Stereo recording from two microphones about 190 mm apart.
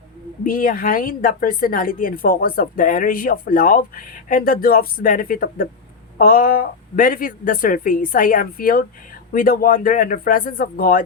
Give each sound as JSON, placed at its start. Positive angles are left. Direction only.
{"t": 0.4, "sound": "speech", "side_deg": 45}